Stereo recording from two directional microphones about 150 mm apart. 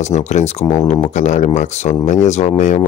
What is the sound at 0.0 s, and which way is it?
Speech, 50° left (ahead or behind).